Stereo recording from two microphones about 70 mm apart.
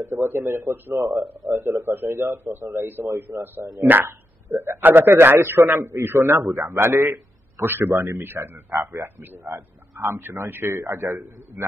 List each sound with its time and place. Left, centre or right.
0.1 s a man's voice: right
0.9 s speech: right
1.5 s a man's voice: right
6.3 s a man's voice: right